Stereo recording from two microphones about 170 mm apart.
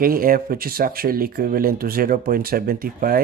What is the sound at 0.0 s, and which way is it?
Speech, 60° right (ahead or behind).